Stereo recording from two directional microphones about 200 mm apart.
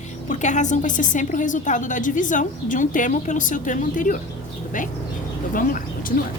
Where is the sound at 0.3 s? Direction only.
35° left (ahead or behind).